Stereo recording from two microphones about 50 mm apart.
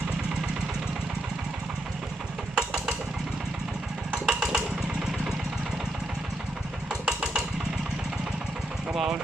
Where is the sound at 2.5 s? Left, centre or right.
Centre.